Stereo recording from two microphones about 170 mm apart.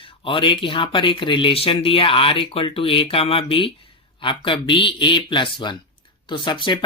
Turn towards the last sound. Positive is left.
turn(degrees=30)  # may be behind; listen again after turning